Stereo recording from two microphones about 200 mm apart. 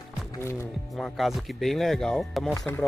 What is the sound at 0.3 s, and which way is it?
Speech, 15° left (ahead or behind).